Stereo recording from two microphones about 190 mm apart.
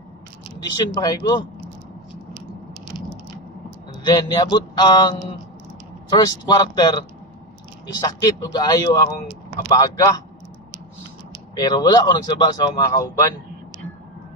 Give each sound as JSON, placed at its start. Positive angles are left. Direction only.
{"t": 0.6, "sound": "speech", "side_deg": 20}
{"t": 4.0, "sound": "speech", "side_deg": 20}
{"t": 11.5, "sound": "speech", "side_deg": 20}